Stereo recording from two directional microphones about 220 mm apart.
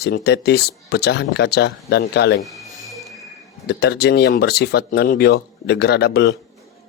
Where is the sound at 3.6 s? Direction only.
50° left (ahead or behind).